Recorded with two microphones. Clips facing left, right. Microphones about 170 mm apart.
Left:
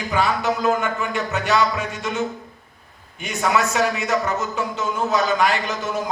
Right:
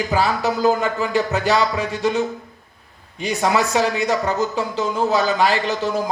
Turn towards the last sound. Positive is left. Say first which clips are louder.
# right 4 dB
turn(degrees=-30)  # may be behind; listen again after turning